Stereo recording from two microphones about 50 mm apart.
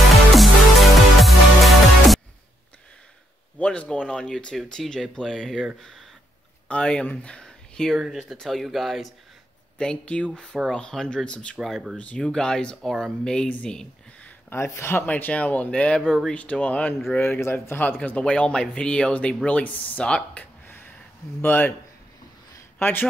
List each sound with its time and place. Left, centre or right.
0.1 s music: centre
3.6 s speech: left
4.1 s speech: centre
6.7 s speech: left
8.1 s speech: centre
9.8 s speech: centre
14.5 s speech: left
15.0 s speech: left
17.4 s speech: left
18.1 s speech: left
20.1 s speech: left
20.6 s a sound: left
21.4 s speech: left
22.8 s a man's voice: left